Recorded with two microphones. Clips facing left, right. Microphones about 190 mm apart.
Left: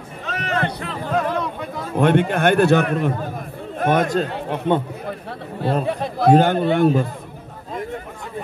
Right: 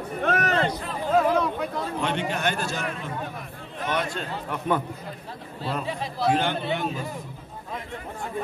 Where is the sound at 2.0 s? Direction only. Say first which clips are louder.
Left 12 dB; 55° left (ahead or behind).